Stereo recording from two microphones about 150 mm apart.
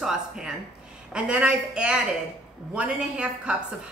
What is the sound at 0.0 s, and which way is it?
A woman's voice, 5° right (ahead or behind).